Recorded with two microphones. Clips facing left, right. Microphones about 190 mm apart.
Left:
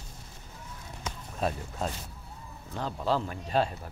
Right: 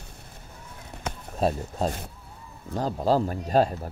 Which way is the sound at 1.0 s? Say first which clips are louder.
Right 5 dB; 60° right (ahead or behind).